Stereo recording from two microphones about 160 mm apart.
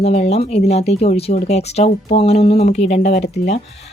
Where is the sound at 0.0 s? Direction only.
40° left (ahead or behind).